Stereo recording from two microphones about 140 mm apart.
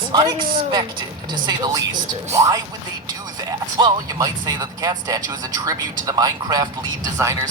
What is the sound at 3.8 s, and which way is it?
A man's voice, 30° right (ahead or behind).